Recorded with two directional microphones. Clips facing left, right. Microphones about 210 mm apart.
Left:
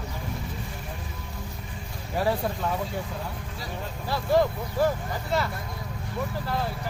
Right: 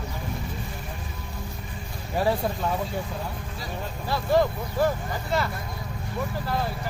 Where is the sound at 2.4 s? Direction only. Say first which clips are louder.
Right 1 dB; 25° right (ahead or behind).